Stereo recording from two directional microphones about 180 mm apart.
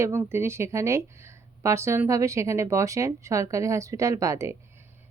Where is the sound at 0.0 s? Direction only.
15° right (ahead or behind).